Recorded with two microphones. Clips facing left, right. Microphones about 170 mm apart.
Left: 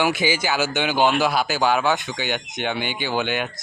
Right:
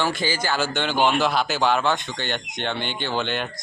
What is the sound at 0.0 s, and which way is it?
Speech, 10° left (ahead or behind).